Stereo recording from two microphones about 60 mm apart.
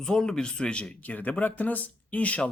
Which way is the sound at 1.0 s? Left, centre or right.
Left.